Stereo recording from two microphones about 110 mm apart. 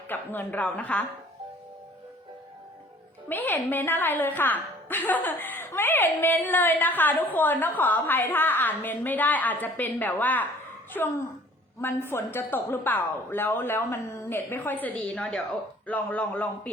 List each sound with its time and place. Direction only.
0.1 s a woman's voice: 15° left (ahead or behind)
3.2 s a woman's voice: 15° left (ahead or behind)